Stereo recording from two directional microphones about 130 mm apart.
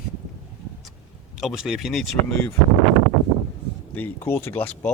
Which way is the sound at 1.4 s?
Centre (ahead or behind).